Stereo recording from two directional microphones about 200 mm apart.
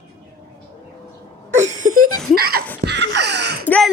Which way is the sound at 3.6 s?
5° left (ahead or behind).